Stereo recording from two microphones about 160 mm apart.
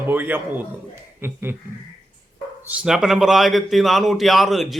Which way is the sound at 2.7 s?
5° right (ahead or behind).